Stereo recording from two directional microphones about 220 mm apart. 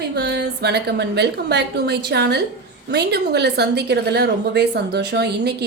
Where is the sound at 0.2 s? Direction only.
50° right (ahead or behind).